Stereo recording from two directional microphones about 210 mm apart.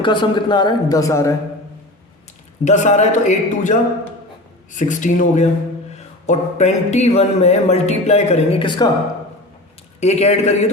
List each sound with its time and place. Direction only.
0.0 s speech: 20° left (ahead or behind)
2.6 s speech: 35° left (ahead or behind)
4.8 s speech: 35° left (ahead or behind); by 8.9 s 20° left (ahead or behind)
10.0 s speech: 30° left (ahead or behind)